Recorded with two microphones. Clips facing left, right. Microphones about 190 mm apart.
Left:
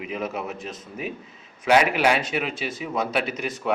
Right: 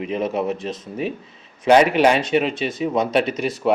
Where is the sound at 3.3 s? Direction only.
35° right (ahead or behind).